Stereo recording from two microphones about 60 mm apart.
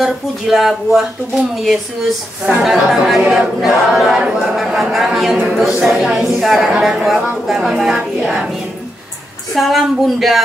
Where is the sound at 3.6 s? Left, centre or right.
Centre.